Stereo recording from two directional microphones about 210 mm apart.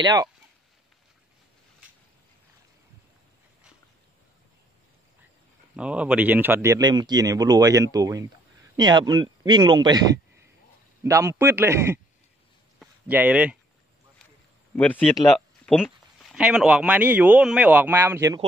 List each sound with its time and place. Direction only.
0.0 s speech: 20° right (ahead or behind)
5.8 s speech: 5° right (ahead or behind)
12.7 s a sound: 5° right (ahead or behind)
14.8 s speech: 5° left (ahead or behind); by 18.4 s 10° right (ahead or behind)